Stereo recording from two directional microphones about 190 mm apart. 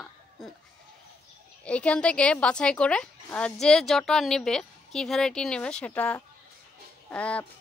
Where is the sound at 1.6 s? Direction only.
5° left (ahead or behind).